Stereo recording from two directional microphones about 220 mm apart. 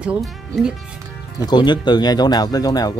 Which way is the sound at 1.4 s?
20° left (ahead or behind).